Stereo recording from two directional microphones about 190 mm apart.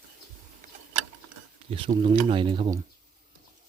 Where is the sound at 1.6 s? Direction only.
30° right (ahead or behind).